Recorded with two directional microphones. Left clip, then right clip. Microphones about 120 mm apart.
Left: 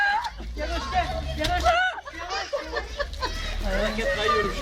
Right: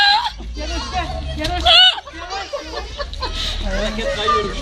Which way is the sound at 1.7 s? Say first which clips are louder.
Right 13 dB; 30° right (ahead or behind).